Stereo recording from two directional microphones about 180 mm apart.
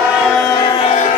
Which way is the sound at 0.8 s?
40° left (ahead or behind).